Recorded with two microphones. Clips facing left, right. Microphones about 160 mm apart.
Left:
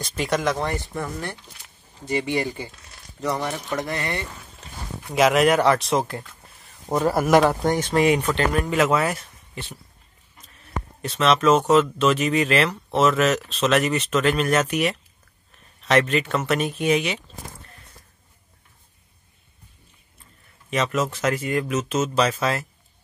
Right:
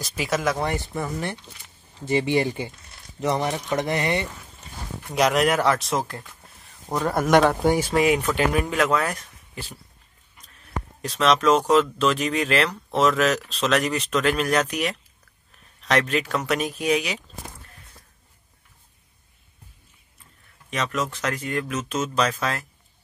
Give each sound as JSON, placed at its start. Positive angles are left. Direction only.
{"t": 0.0, "sound": "speech", "side_deg": -5}
{"t": 2.0, "sound": "speech", "side_deg": -25}
{"t": 5.0, "sound": "speech", "side_deg": 0}
{"t": 7.6, "sound": "speech", "side_deg": -10}
{"t": 10.4, "sound": "speech", "side_deg": 0}
{"t": 20.7, "sound": "speech", "side_deg": 5}